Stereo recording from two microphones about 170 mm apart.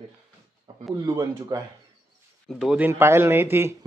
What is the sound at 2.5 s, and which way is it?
Speech, 5° right (ahead or behind).